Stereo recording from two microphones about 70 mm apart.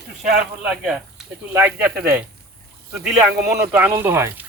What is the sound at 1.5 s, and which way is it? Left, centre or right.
Speech, right.